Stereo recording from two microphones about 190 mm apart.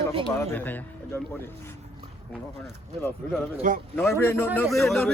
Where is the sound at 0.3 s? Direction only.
10° left (ahead or behind).